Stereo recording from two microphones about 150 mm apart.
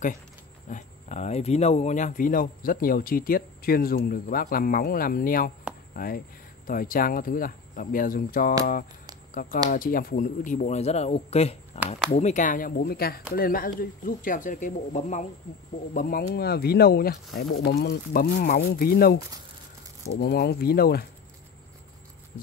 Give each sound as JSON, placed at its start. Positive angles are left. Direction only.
{"t": 0.7, "sound": "a man's voice", "side_deg": 55}
{"t": 13.4, "sound": "speech", "side_deg": 75}
{"t": 15.9, "sound": "speech", "side_deg": 70}